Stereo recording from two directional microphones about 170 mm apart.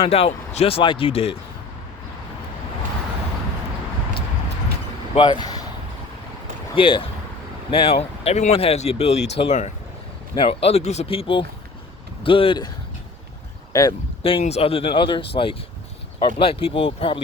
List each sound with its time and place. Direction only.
0.0 s speech: 35° left (ahead or behind)
5.1 s speech: 25° left (ahead or behind)
6.7 s speech: 30° left (ahead or behind)
13.7 s speech: 20° left (ahead or behind)
14.2 s speech: 30° left (ahead or behind)